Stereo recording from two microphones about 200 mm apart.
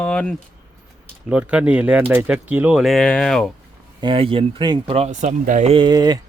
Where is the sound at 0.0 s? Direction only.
5° left (ahead or behind).